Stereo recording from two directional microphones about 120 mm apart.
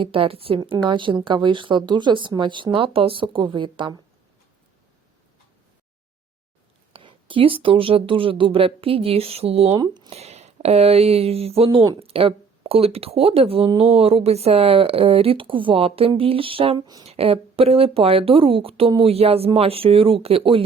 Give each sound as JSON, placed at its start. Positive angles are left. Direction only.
{"t": 0.0, "sound": "speech", "side_deg": -50}
{"t": 0.6, "sound": "speech", "side_deg": -40}
{"t": 6.9, "sound": "speech", "side_deg": -45}
{"t": 9.8, "sound": "speech", "side_deg": -35}
{"t": 10.1, "sound": "speech", "side_deg": -60}